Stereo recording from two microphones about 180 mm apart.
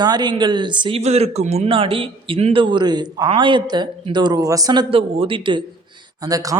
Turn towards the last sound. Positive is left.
turn(degrees=-20)  # may be behind; listen again after turning